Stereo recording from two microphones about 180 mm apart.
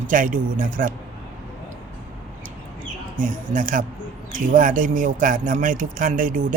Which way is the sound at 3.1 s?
45° right (ahead or behind).